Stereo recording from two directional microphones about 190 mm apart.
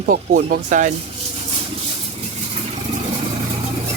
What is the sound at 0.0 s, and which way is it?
Speech, 55° right (ahead or behind).